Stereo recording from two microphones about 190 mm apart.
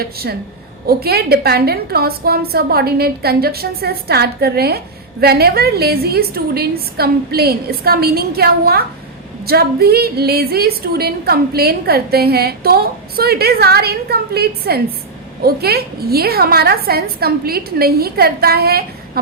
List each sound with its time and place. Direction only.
0.0 s a woman's voice: 55° right (ahead or behind)